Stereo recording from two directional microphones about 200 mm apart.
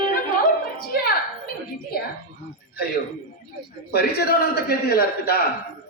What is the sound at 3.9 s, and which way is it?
A woman's voice, 50° left (ahead or behind).